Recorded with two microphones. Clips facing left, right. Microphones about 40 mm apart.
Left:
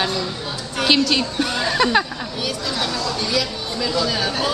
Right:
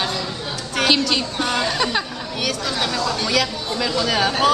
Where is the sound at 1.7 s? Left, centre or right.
Centre.